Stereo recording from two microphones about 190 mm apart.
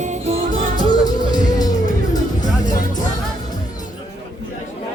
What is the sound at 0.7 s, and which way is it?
Music, 20° left (ahead or behind).